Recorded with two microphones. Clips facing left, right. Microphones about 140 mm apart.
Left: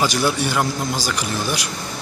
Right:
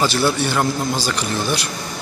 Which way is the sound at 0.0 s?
15° left (ahead or behind).